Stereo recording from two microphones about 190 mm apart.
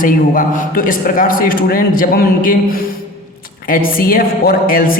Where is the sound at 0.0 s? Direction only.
45° left (ahead or behind).